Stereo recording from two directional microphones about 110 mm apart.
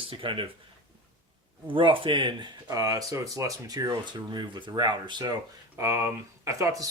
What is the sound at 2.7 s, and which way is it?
Speech, 35° right (ahead or behind).